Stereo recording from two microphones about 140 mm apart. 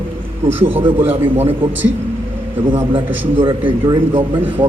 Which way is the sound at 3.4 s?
40° right (ahead or behind).